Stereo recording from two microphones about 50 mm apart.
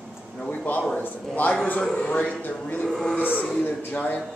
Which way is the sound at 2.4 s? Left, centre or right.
Left.